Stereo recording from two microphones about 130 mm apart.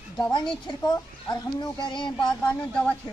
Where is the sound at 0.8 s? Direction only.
35° left (ahead or behind).